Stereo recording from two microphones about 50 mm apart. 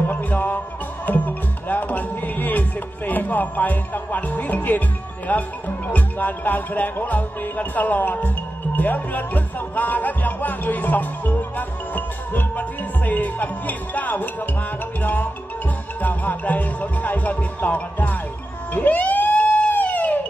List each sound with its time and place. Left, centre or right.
0.0 s music: left
1.0 s speech: left
18.7 s emergency vehicle: left
19.4 s police car: left
19.7 s a sound: left